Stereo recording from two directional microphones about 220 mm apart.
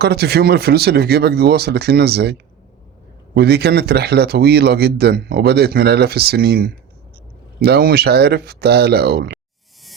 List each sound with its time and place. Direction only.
0.0 s speech: 45° right (ahead or behind)
3.3 s speech: 45° right (ahead or behind)